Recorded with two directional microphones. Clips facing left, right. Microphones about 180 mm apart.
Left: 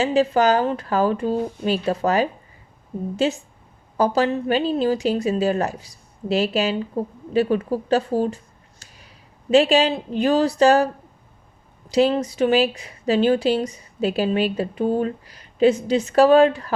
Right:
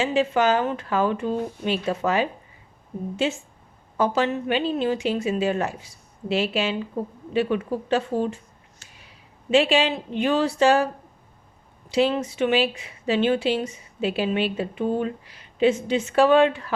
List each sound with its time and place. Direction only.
0.0 s speech: 40° left (ahead or behind)
8.8 s a sound: 40° left (ahead or behind)
9.5 s speech: 40° left (ahead or behind)
11.9 s speech: 40° left (ahead or behind)